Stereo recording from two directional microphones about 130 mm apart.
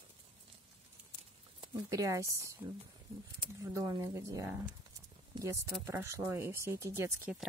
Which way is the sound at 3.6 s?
25° right (ahead or behind).